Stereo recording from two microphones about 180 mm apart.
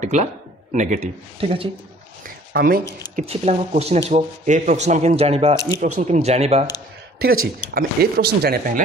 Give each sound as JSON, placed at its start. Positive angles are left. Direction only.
{"t": 0.0, "sound": "speech", "side_deg": -40}
{"t": 2.2, "sound": "a sound", "side_deg": -55}
{"t": 2.8, "sound": "speech", "side_deg": 15}
{"t": 3.2, "sound": "speech", "side_deg": -35}
{"t": 7.2, "sound": "speech", "side_deg": -55}